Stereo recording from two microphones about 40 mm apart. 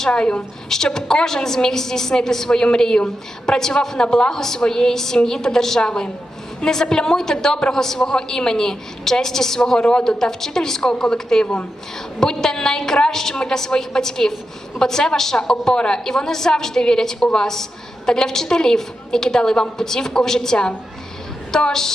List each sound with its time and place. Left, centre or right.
0.1 s a woman's voice: left
0.7 s a woman's voice: centre
9.7 s a woman's voice: left